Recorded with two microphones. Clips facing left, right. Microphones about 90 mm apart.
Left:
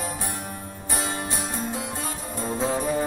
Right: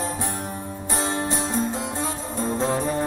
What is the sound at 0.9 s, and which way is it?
Music, 25° right (ahead or behind).